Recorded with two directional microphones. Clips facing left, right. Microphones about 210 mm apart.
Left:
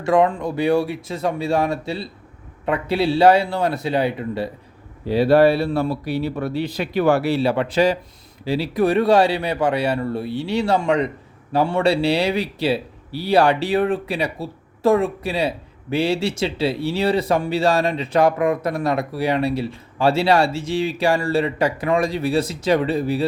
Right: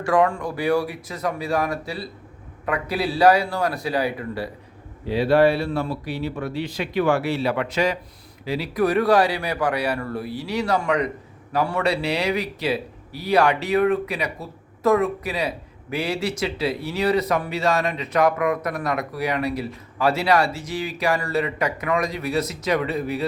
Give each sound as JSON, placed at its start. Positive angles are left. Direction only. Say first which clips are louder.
{"t": 0.0, "sound": "speech", "louder": "left 3 dB", "side_deg": 25}
{"t": 5.0, "sound": "speech", "louder": "left 3 dB", "side_deg": 35}